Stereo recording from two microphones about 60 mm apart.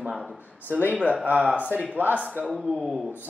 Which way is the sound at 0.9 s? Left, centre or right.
Centre.